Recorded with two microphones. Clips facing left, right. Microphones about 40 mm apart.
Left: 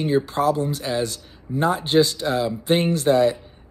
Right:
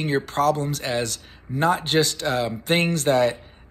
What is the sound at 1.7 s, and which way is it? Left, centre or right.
Speech, right.